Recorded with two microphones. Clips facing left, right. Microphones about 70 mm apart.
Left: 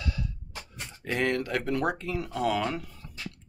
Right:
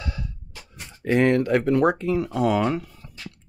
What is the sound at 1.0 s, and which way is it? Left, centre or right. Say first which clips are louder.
Speech: right 9 dB; right.